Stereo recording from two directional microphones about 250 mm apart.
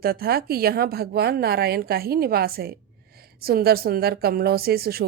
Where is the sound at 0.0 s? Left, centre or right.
Right.